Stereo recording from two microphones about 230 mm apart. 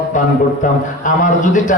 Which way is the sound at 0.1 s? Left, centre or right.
Left.